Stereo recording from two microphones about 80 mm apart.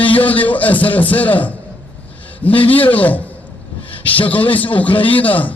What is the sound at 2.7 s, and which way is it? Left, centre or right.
Speech, left.